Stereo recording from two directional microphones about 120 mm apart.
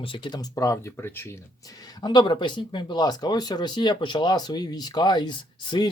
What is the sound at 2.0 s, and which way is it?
Speech, 40° left (ahead or behind).